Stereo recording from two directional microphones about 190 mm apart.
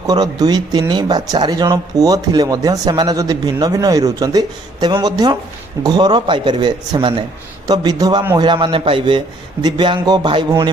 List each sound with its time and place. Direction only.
0.1 s speech: 20° right (ahead or behind)